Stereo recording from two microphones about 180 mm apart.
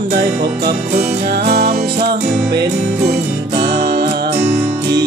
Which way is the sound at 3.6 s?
70° right (ahead or behind).